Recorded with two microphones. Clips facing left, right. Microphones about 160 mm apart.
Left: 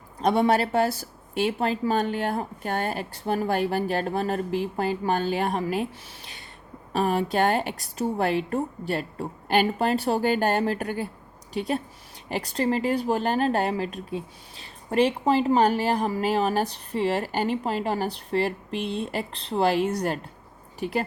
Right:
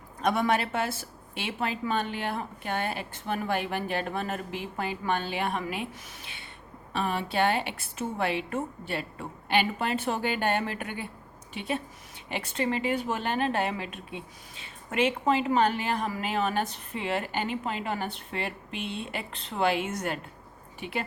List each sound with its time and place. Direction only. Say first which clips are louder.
0.2 s speech: left 5 dB; 35° left (ahead or behind)